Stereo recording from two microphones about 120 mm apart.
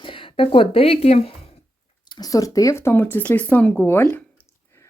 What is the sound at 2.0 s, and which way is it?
Speech, 35° left (ahead or behind).